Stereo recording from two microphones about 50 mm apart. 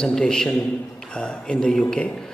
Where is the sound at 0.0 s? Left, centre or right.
Centre.